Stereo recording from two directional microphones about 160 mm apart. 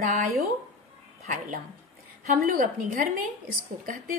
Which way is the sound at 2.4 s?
60° right (ahead or behind).